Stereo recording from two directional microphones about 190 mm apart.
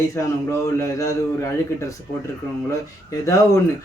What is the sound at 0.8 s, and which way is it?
Speech, 15° left (ahead or behind).